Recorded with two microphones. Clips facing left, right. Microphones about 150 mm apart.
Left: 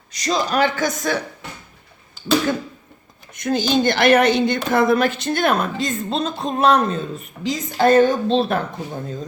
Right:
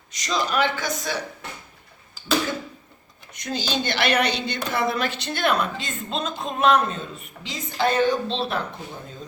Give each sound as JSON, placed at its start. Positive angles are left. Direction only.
{"t": 0.1, "sound": "speech", "side_deg": 35}
{"t": 3.3, "sound": "a woman's voice", "side_deg": 50}